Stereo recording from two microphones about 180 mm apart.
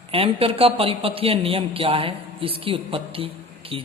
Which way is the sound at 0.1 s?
30° right (ahead or behind).